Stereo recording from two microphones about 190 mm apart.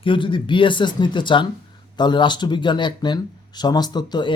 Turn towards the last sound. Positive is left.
turn(degrees=25)  # may be behind; listen again after turning